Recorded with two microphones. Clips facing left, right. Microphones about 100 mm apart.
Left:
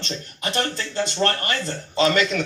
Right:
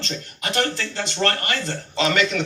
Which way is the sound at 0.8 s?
35° left (ahead or behind).